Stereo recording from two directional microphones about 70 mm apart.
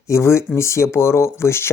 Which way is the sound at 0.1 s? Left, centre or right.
Left.